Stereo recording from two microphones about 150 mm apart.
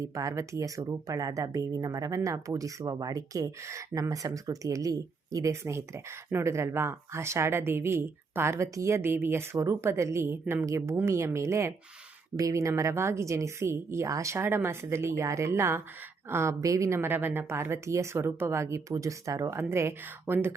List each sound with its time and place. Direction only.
0.0 s a woman's voice: 20° right (ahead or behind)